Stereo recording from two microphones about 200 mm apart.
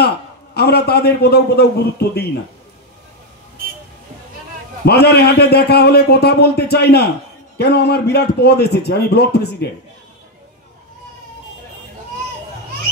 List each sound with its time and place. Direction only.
0.6 s a man's voice: 55° left (ahead or behind)
4.8 s a man's voice: 55° left (ahead or behind)